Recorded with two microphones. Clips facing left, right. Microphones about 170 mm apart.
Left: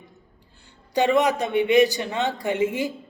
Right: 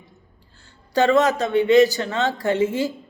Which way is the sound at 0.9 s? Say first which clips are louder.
Right 2 dB; 15° left (ahead or behind).